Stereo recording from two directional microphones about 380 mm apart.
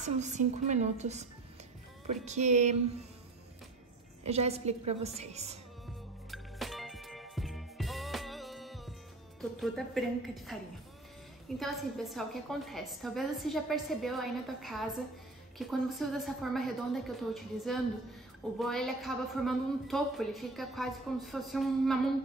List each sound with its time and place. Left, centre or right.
0.0 s a woman's voice: centre
4.2 s a woman's voice: centre
6.3 s music: centre
9.4 s a woman's voice: centre